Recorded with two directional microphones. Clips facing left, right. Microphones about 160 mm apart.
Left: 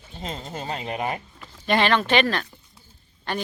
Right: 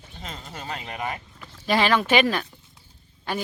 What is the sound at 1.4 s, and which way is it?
Speech, 5° right (ahead or behind).